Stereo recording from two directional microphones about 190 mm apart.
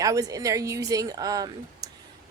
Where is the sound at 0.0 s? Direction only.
20° right (ahead or behind).